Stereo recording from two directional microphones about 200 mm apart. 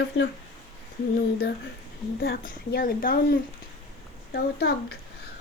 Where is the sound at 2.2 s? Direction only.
50° left (ahead or behind).